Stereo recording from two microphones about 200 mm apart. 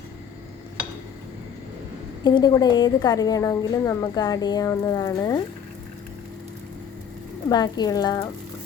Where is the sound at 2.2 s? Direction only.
20° left (ahead or behind).